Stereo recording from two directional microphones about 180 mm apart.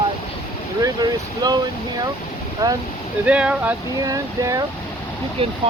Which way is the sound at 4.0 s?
20° right (ahead or behind).